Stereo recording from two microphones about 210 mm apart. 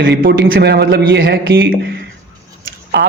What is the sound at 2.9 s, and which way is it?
Speech, 55° right (ahead or behind).